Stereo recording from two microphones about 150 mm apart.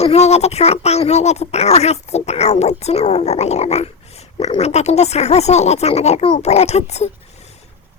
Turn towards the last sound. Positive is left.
turn(degrees=45)  # may be behind; listen again after turning